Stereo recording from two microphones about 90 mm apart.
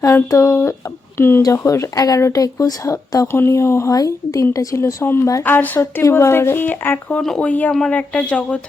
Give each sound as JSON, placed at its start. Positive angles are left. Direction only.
{"t": 0.3, "sound": "speech", "side_deg": 40}